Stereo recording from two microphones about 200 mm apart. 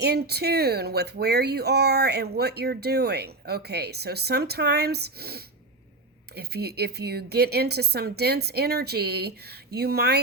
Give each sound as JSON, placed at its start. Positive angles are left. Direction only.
{"t": 0.0, "sound": "speech", "side_deg": -55}